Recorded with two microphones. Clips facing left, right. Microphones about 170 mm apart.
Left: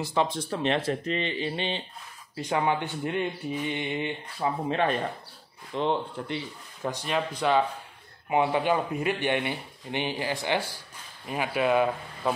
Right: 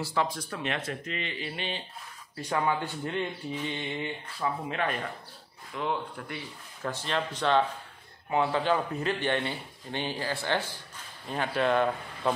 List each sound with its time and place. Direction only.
0.0 s a man's voice: 20° left (ahead or behind)
4.6 s a man's voice: 30° left (ahead or behind); by 12.4 s 5° left (ahead or behind)